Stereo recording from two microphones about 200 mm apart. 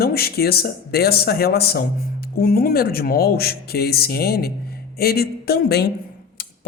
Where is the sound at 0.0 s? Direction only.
50° left (ahead or behind).